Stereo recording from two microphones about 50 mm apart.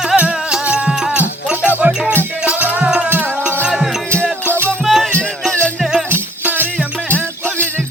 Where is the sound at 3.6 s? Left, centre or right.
Centre.